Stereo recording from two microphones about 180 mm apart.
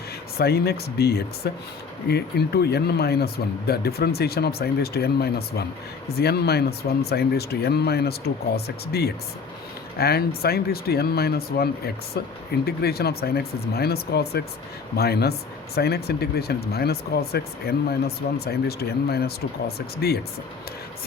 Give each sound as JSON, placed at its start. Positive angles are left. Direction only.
{"t": 0.3, "sound": "speech", "side_deg": 60}